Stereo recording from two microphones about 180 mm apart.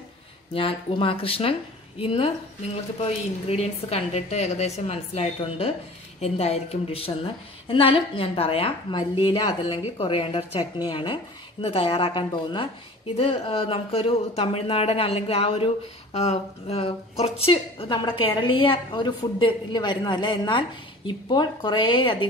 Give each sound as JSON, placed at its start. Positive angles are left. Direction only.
{"t": 0.6, "sound": "a woman's voice", "side_deg": 30}
{"t": 3.4, "sound": "a woman's voice", "side_deg": 35}